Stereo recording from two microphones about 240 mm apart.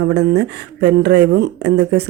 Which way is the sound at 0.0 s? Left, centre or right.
Right.